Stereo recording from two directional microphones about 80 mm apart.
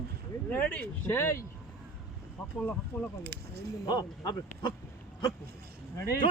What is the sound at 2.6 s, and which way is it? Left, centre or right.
Speech, centre.